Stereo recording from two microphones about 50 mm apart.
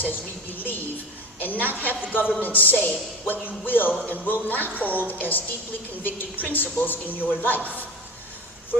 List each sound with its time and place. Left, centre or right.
0.1 s a woman's voice: left